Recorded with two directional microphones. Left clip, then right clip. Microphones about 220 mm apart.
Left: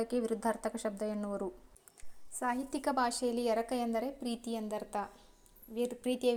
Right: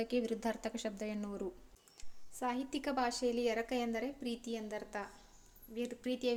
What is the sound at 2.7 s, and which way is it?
A woman's voice, 10° left (ahead or behind).